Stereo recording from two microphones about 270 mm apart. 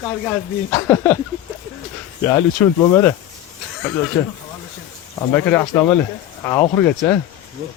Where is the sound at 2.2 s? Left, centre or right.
Centre.